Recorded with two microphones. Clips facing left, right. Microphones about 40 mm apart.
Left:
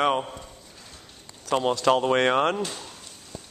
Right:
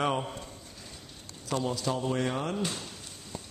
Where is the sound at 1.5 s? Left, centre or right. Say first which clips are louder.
Left 9 dB; left.